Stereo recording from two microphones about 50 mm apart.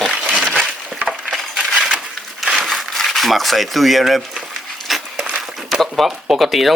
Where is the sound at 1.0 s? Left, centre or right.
Right.